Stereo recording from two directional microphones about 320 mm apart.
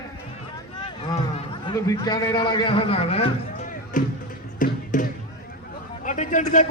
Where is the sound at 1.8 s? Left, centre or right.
Centre.